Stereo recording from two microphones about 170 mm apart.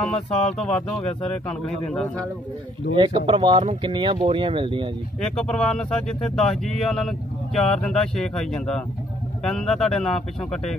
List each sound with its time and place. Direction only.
0.0 s speech: 5° left (ahead or behind)
3.0 s speech: 30° right (ahead or behind)
5.2 s speech: 5° left (ahead or behind)